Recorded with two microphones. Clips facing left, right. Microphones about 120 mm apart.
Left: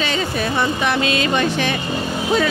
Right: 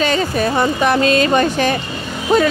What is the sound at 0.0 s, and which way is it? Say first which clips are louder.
A woman's voice: right 5 dB; 45° right (ahead or behind).